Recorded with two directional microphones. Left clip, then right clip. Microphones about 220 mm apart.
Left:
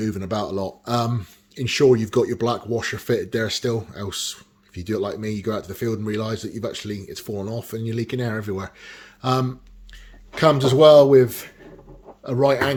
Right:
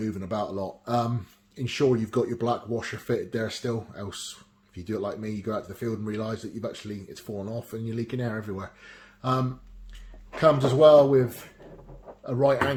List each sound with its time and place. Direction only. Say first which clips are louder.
0.0 s speech: left 4 dB; 35° left (ahead or behind)